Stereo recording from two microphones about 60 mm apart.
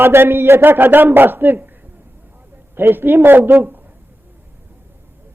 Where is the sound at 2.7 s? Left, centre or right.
Right.